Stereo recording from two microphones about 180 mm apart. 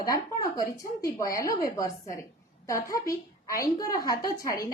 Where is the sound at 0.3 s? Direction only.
20° left (ahead or behind).